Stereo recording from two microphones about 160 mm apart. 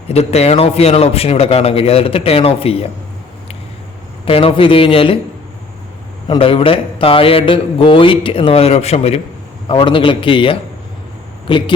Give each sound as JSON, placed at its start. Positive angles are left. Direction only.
{"t": 0.1, "sound": "a man's voice", "side_deg": 40}
{"t": 4.3, "sound": "a man's voice", "side_deg": 35}
{"t": 6.2, "sound": "a man's voice", "side_deg": 30}